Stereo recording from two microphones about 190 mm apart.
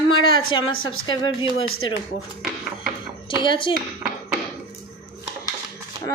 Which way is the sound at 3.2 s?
25° left (ahead or behind).